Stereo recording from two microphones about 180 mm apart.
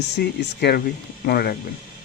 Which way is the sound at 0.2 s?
65° left (ahead or behind).